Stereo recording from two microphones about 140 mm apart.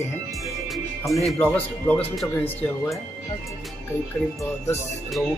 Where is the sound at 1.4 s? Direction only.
15° left (ahead or behind).